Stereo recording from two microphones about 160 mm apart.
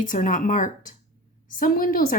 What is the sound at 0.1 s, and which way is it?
A woman's voice, 55° left (ahead or behind).